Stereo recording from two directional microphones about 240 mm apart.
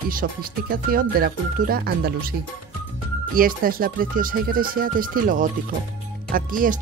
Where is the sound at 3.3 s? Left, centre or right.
Right.